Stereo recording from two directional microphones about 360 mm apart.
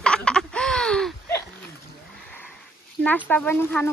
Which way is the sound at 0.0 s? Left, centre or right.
Centre.